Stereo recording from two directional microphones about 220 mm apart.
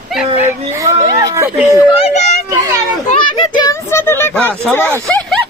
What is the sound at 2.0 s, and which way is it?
Children playing, 30° left (ahead or behind).